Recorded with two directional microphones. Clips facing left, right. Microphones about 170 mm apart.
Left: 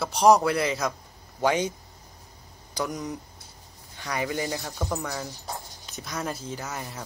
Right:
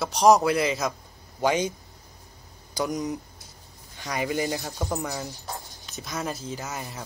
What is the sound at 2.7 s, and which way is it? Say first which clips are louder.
Speech: right 3 dB; 10° right (ahead or behind).